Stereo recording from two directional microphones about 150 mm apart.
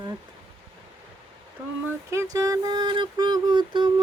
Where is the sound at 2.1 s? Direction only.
20° right (ahead or behind).